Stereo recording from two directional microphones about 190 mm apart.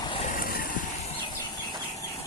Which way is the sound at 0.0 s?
30° left (ahead or behind).